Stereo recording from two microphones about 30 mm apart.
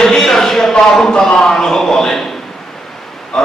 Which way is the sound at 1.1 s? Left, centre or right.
Left.